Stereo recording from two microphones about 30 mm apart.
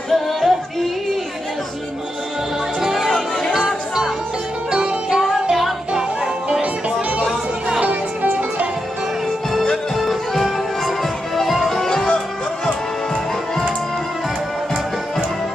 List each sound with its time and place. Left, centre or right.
0.1 s music: centre
2.8 s music: centre
4.6 s music: right
5.2 s music: centre
6.6 s music: right
8.2 s music: right
9.9 s music: centre
11.7 s music: centre